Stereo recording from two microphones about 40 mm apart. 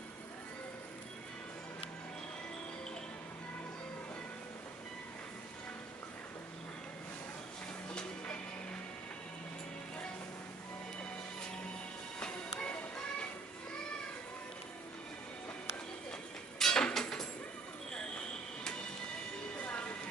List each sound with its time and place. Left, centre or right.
7.9 s music: left
12.2 s music: left
16.5 s a sound: centre
19.5 s train: left